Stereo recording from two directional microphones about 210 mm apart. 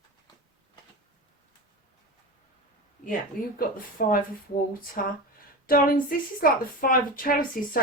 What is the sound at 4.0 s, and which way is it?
A woman's voice, 45° left (ahead or behind).